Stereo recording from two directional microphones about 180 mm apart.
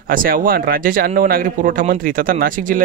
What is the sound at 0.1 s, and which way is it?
Speech, 50° right (ahead or behind).